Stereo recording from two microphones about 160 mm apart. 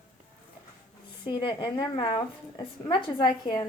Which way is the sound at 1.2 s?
30° left (ahead or behind).